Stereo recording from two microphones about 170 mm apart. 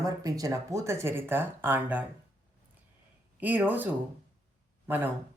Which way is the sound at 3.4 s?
10° right (ahead or behind).